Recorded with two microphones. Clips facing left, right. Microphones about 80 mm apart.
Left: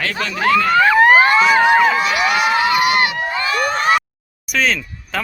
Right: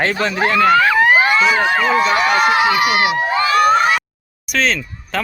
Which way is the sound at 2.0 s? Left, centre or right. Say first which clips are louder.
Right 2 dB; right.